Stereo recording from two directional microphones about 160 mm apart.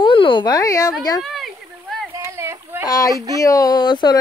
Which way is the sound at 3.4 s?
20° left (ahead or behind).